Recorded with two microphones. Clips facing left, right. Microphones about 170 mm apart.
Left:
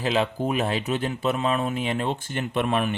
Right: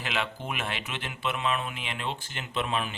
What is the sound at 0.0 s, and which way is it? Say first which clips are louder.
Speech: left 9 dB; 35° left (ahead or behind).